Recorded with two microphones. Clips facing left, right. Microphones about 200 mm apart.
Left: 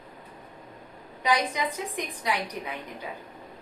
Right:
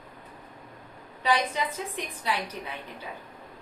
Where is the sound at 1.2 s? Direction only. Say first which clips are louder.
Even; 15° left (ahead or behind).